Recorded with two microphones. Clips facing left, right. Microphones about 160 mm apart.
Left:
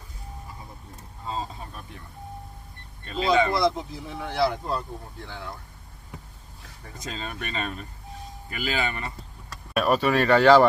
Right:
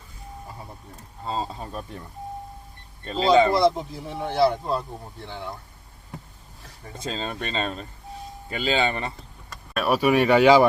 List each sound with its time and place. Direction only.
1.2 s speech: 35° right (ahead or behind)
3.0 s speech: 35° right (ahead or behind)
6.9 s speech: 30° right (ahead or behind)
9.7 s speech: 5° right (ahead or behind)